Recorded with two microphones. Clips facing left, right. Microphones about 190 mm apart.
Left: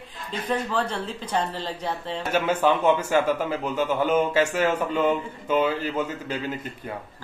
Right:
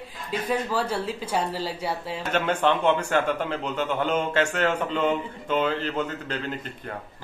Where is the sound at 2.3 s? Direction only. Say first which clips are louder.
Left 1 dB; 5° left (ahead or behind).